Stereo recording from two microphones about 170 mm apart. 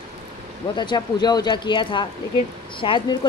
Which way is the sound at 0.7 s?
25° left (ahead or behind).